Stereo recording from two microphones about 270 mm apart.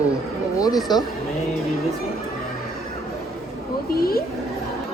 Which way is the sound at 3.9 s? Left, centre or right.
Left.